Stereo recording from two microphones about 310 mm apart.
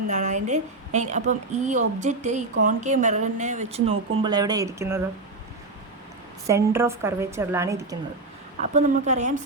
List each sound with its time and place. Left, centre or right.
0.1 s a woman's voice: right
6.5 s a woman's voice: centre
8.7 s a woman's voice: right